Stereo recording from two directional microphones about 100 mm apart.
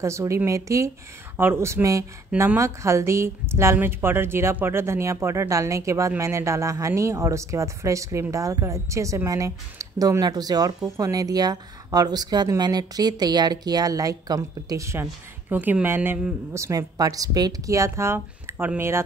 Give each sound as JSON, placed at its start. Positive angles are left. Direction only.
{"t": 0.0, "sound": "a woman's voice", "side_deg": -30}
{"t": 15.5, "sound": "a woman's voice", "side_deg": -20}
{"t": 16.5, "sound": "a woman's voice", "side_deg": -35}